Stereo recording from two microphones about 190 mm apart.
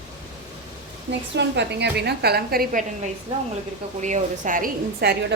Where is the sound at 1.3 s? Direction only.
65° right (ahead or behind).